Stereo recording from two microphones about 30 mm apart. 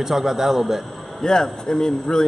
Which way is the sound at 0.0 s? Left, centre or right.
Centre.